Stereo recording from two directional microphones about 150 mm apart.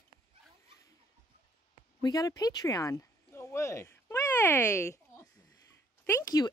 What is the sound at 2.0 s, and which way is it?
Speech, 25° left (ahead or behind).